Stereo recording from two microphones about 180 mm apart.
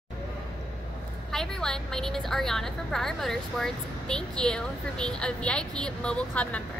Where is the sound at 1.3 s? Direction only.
5° left (ahead or behind).